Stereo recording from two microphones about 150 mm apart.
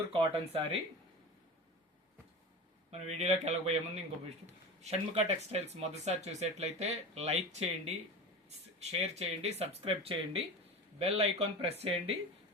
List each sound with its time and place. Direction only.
0.1 s speech: 35° right (ahead or behind)
2.9 s speech: 50° right (ahead or behind)